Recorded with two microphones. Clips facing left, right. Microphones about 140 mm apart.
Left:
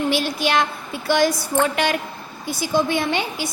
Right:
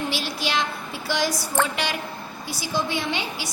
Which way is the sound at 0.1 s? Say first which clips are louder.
Left 7 dB; 55° left (ahead or behind).